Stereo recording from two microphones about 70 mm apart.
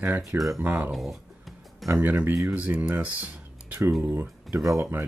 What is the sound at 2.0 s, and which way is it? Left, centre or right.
Speech, right.